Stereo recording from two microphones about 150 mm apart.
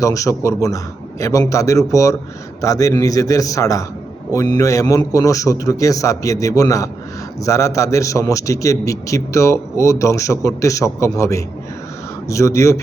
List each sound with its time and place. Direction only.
0.0 s a man's voice: 20° left (ahead or behind)